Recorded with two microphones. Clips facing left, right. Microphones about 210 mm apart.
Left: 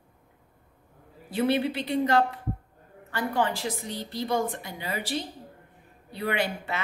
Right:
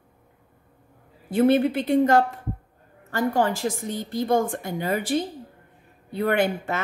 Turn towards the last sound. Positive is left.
turn(degrees=-50)  # may be behind; listen again after turning